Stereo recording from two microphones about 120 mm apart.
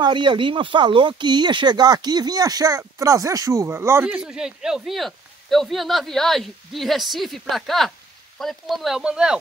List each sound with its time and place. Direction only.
0.0 s speech: 40° right (ahead or behind); by 9.4 s 5° right (ahead or behind)